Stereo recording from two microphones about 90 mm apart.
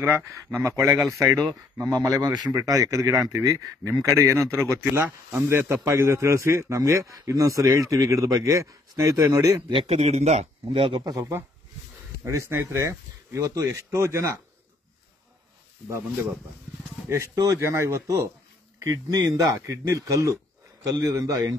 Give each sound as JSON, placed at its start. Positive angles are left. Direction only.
{"t": 0.0, "sound": "a man's voice", "side_deg": -30}
{"t": 10.7, "sound": "speech", "side_deg": -65}
{"t": 11.1, "sound": "a man's voice", "side_deg": -35}
{"t": 17.1, "sound": "a man's voice", "side_deg": -30}